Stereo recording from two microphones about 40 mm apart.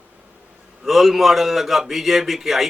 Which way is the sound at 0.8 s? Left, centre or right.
Centre.